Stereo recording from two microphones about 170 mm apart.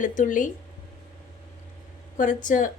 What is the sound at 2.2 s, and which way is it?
Speech, 50° left (ahead or behind).